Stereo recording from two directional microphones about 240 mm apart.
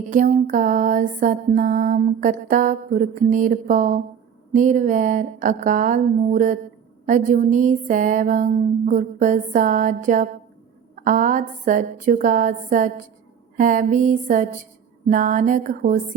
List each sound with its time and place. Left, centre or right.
0.1 s music: right